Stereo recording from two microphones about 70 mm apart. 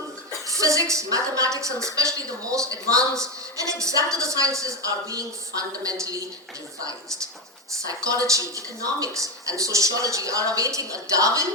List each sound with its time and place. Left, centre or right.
0.4 s a woman's voice: right
7.9 s a woman's voice: right